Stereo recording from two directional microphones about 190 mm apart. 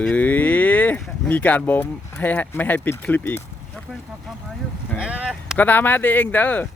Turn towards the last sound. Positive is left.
turn(degrees=10)  # may be behind; listen again after turning